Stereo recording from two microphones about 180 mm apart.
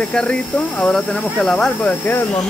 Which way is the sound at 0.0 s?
5° left (ahead or behind).